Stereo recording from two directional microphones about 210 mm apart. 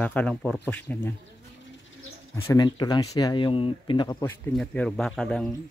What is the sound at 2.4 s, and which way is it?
Speech, 20° left (ahead or behind).